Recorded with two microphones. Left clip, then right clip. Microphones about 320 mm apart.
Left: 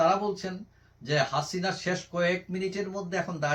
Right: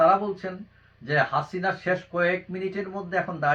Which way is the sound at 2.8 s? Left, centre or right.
Centre.